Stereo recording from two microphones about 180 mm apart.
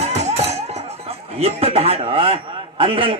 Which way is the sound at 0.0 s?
35° right (ahead or behind).